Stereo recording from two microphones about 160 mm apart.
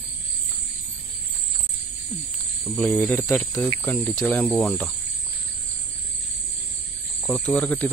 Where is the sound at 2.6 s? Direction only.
Centre (ahead or behind).